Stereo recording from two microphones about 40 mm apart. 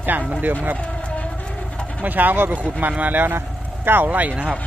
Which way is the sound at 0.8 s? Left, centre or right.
Left.